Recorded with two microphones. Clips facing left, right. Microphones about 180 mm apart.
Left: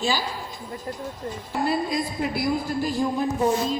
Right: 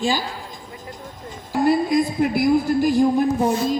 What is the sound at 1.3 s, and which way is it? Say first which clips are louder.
A man's voice: right 7 dB; 45° right (ahead or behind).